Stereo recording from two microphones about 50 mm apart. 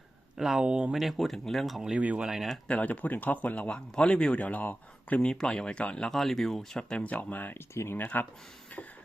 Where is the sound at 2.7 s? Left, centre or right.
Left.